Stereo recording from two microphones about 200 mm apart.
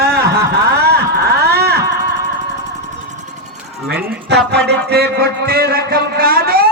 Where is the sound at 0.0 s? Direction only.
55° right (ahead or behind).